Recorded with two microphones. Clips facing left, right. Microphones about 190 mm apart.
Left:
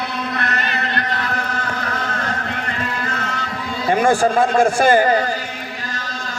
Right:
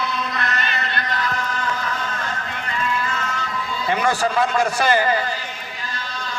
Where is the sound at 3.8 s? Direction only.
50° left (ahead or behind).